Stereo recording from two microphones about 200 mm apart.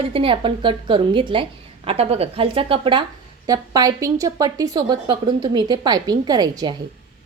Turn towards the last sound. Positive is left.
turn(degrees=-20)  # may be behind; listen again after turning